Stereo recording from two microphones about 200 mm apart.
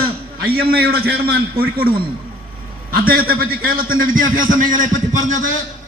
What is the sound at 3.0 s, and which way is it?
A man's voice, 50° right (ahead or behind).